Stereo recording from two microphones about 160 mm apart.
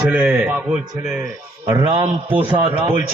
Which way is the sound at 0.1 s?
10° right (ahead or behind).